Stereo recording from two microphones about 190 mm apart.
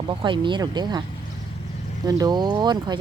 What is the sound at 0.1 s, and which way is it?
Speech, 25° right (ahead or behind).